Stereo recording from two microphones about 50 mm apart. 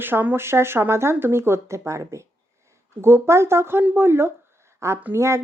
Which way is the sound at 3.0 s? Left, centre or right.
Right.